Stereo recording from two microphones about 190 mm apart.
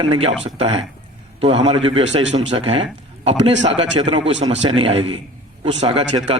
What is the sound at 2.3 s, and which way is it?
A man's voice, 30° right (ahead or behind).